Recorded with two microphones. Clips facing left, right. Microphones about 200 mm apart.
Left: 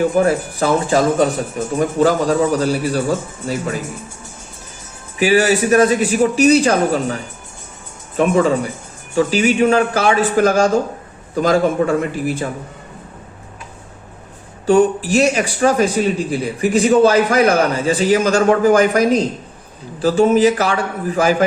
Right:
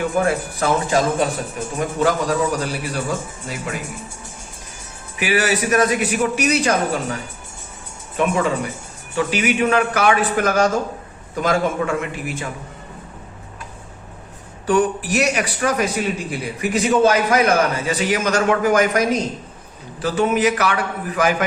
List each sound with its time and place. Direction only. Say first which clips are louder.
0.0 s a man's voice: left 5 dB; 35° left (ahead or behind)
2.0 s a man's voice: left 4 dB; 35° left (ahead or behind)
5.2 s a man's voice: left 6 dB; 30° left (ahead or behind)
14.7 s a man's voice: left 5 dB; 30° left (ahead or behind)